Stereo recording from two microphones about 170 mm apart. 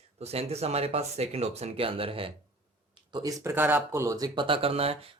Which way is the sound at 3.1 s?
20° right (ahead or behind).